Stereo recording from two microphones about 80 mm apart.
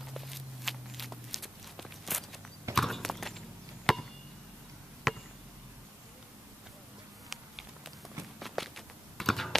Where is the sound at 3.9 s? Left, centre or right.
Centre.